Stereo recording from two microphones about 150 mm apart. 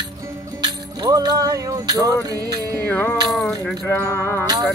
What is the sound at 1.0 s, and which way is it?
Speech, 25° right (ahead or behind).